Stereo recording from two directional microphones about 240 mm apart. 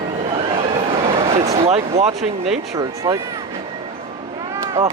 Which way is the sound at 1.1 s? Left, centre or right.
Right.